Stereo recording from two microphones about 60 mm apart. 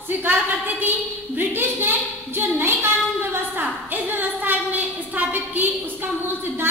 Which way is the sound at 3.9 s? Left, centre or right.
Right.